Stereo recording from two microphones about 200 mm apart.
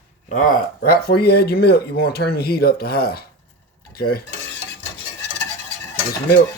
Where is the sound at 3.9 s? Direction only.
50° left (ahead or behind).